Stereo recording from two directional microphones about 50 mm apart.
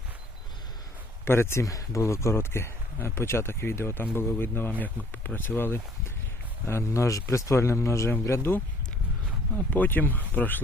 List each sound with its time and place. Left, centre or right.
1.2 s speech: left
6.7 s speech: left
8.4 s speech: left
9.6 s speech: left